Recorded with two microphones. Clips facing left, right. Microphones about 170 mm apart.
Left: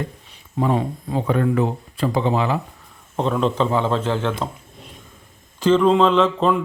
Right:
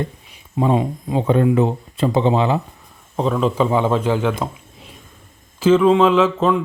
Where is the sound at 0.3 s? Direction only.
15° right (ahead or behind).